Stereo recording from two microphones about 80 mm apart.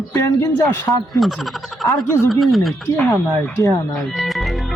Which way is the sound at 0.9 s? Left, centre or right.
Left.